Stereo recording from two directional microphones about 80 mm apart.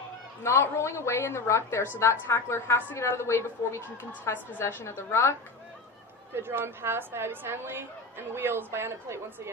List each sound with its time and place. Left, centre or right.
0.4 s a woman's voice: left
6.3 s a woman's voice: right